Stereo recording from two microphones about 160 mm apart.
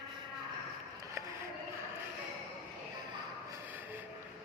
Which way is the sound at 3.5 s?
10° right (ahead or behind).